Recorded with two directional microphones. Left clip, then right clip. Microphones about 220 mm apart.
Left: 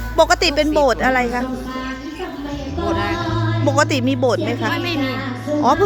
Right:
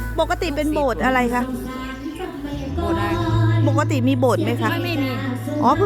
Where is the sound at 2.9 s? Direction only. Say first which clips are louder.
Left 2 dB; 10° right (ahead or behind).